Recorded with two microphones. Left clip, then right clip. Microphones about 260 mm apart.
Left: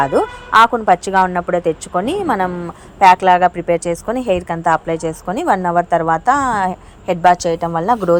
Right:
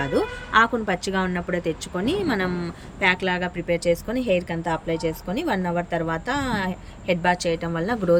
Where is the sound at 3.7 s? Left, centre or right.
Centre.